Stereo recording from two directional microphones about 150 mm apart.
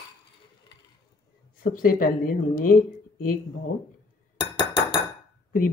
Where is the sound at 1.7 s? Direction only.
70° left (ahead or behind).